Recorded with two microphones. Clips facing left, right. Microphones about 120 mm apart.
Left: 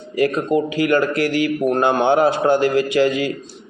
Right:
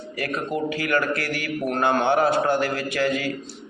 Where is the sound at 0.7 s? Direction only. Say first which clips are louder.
Left 6 dB; 20° left (ahead or behind).